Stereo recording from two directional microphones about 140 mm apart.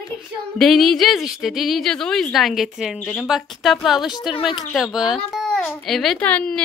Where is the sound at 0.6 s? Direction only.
Centre (ahead or behind).